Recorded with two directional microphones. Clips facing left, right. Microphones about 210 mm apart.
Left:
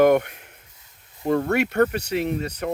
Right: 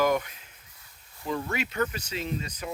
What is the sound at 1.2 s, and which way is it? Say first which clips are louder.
Speech: left 10 dB; 60° left (ahead or behind).